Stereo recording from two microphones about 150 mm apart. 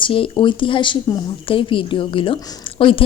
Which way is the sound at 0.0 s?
35° left (ahead or behind).